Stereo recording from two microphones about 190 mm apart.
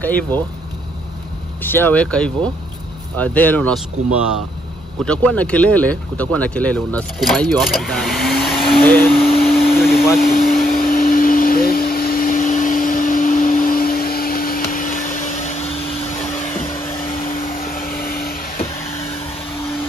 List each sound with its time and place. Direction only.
0.0 s speech: 10° left (ahead or behind)
1.6 s speech: 10° left (ahead or behind)
5.0 s speech: 5° left (ahead or behind)
8.8 s speech: 10° left (ahead or behind)
9.1 s vacuum cleaner: 30° left (ahead or behind)